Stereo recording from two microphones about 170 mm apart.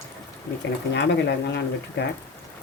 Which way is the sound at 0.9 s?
90° left.